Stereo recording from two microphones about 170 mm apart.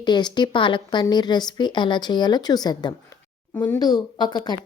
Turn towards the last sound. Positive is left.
turn(degrees=25)  # may be behind; listen again after turning